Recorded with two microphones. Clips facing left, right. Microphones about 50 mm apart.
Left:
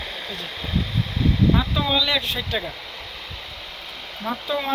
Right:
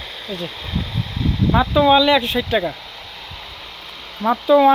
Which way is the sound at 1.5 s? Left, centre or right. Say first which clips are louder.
Right 9 dB; right.